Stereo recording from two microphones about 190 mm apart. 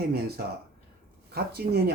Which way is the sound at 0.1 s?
55° right (ahead or behind).